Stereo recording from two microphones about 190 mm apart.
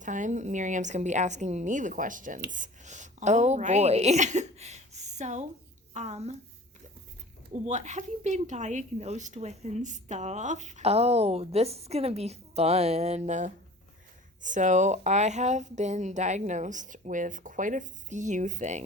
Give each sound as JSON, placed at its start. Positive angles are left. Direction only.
{"t": 0.0, "sound": "a woman's voice", "side_deg": -40}
{"t": 7.6, "sound": "speech", "side_deg": -40}